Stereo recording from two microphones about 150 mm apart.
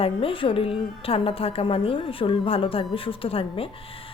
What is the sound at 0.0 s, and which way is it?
Speech, 40° left (ahead or behind).